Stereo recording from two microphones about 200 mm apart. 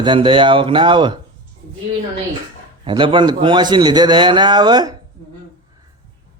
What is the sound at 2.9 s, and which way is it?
Speech, 25° right (ahead or behind).